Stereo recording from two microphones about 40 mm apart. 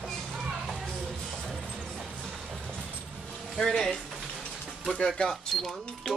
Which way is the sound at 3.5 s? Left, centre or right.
Centre.